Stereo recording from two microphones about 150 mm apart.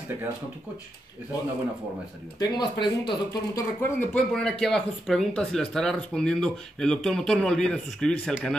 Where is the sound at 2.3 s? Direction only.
25° left (ahead or behind).